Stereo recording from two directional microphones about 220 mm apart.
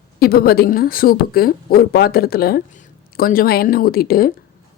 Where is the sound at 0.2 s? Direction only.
45° left (ahead or behind).